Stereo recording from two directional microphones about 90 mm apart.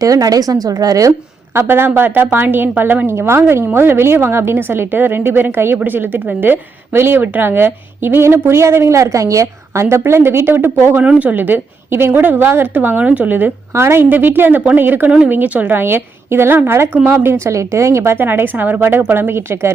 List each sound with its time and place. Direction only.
0.0 s a woman's voice: 40° right (ahead or behind)
1.5 s a woman's voice: 25° right (ahead or behind)